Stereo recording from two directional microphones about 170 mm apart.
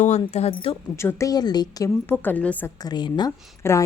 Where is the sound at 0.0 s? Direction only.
40° left (ahead or behind).